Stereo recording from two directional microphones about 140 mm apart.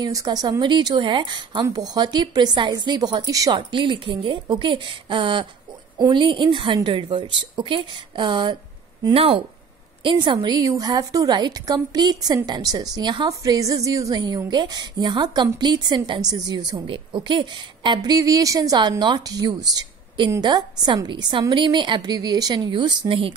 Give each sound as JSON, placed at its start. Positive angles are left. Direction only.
{"t": 0.0, "sound": "a woman's voice", "side_deg": -25}
{"t": 3.5, "sound": "a woman's voice", "side_deg": -35}
{"t": 9.1, "sound": "speech", "side_deg": -45}
{"t": 10.0, "sound": "a woman's voice", "side_deg": -35}